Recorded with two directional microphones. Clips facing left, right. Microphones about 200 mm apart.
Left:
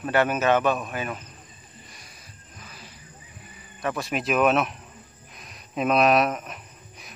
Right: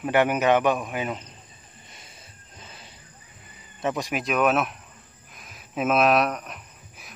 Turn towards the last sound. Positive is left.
turn(degrees=0)  # may be behind; listen again after turning